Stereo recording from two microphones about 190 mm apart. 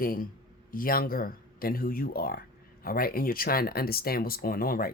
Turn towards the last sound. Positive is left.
turn(degrees=50)  # may be behind; listen again after turning